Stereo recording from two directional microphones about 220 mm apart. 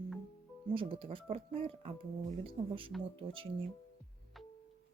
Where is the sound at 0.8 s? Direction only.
25° right (ahead or behind).